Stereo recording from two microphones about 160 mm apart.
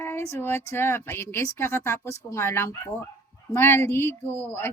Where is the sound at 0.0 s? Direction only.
15° left (ahead or behind).